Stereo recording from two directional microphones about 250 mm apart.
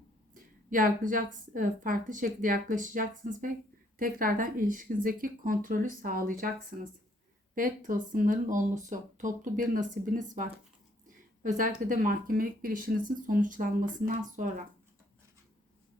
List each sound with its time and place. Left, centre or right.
0.3 s a woman's voice: right
7.5 s a woman's voice: right